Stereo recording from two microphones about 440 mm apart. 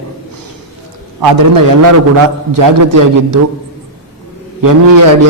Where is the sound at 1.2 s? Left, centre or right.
Right.